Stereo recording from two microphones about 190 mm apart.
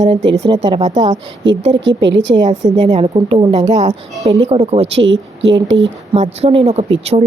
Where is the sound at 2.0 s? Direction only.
70° right (ahead or behind).